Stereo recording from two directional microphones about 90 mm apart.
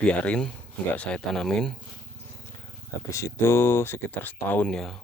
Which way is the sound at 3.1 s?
30° left (ahead or behind).